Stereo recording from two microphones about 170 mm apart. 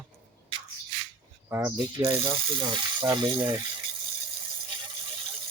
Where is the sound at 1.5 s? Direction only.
15° right (ahead or behind).